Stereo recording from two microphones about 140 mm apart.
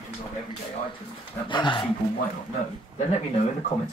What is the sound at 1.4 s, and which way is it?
Speech, 35° left (ahead or behind).